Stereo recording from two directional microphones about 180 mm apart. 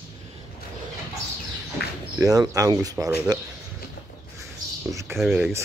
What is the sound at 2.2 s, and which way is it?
Speech, 20° right (ahead or behind).